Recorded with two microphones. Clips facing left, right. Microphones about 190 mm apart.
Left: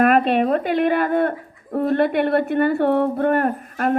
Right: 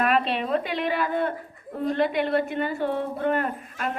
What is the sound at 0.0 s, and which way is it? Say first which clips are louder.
Speech: left 8 dB; 50° left (ahead or behind).